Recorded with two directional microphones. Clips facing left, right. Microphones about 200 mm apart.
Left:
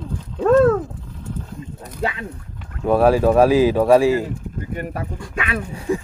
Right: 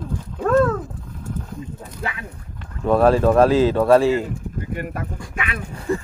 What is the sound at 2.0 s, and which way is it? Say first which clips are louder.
Speech: left 6 dB; 25° left (ahead or behind).